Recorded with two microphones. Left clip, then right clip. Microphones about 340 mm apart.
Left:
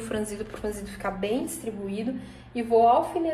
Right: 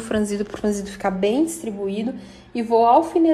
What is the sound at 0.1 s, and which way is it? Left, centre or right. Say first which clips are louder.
A woman's voice: right 9 dB; right.